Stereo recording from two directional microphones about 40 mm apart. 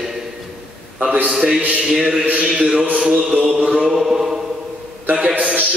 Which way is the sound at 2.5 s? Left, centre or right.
Right.